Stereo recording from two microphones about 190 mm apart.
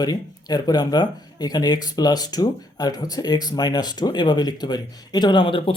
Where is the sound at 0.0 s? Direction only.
20° left (ahead or behind).